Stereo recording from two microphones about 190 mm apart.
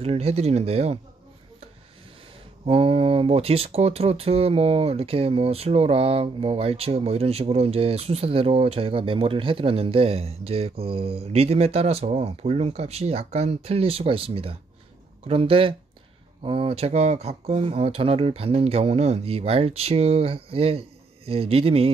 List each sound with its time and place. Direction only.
0.0 s speech: 30° right (ahead or behind)
2.6 s speech: 30° right (ahead or behind)